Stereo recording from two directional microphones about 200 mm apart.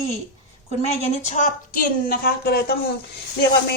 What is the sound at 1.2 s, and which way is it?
A woman's voice, 35° left (ahead or behind).